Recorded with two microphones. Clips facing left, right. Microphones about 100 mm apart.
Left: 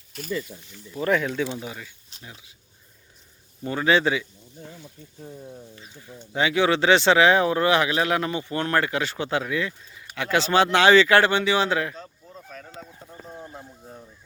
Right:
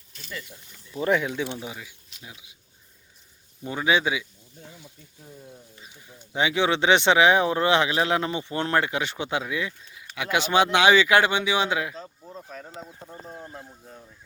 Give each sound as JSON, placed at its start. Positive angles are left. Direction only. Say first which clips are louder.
{"t": 1.0, "sound": "speech", "louder": "left 1 dB", "side_deg": -15}
{"t": 3.6, "sound": "speech", "louder": "left 3 dB", "side_deg": -10}
{"t": 4.8, "sound": "speech", "louder": "left 6 dB", "side_deg": 20}
{"t": 5.7, "sound": "speech", "louder": "left 5 dB", "side_deg": -15}
{"t": 12.2, "sound": "a sound", "louder": "right 3 dB", "side_deg": -25}
{"t": 12.6, "sound": "speech", "louder": "right 1 dB", "side_deg": -25}